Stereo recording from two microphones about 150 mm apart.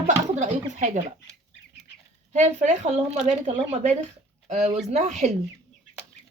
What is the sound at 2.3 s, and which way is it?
Speech, 50° right (ahead or behind).